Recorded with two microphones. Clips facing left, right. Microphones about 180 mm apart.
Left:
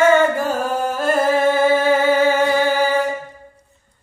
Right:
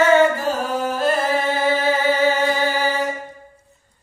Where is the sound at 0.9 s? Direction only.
50° left (ahead or behind).